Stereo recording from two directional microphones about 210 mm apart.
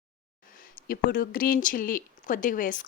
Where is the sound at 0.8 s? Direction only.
45° left (ahead or behind).